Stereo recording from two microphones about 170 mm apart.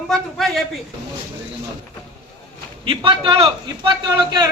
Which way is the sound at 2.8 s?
30° right (ahead or behind).